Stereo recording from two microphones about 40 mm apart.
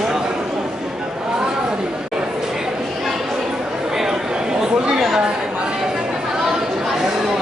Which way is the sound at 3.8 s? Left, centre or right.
Centre.